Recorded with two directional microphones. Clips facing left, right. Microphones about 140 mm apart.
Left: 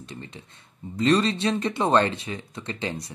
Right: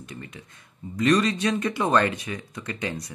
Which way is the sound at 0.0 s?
30° left (ahead or behind).